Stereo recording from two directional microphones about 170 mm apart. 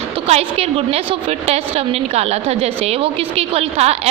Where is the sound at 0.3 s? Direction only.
35° right (ahead or behind).